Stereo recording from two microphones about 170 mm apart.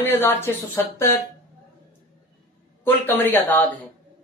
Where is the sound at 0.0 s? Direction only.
15° left (ahead or behind).